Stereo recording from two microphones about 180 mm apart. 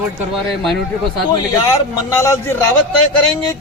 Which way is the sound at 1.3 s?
15° left (ahead or behind).